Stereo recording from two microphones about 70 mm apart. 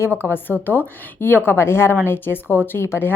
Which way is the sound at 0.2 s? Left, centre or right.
Left.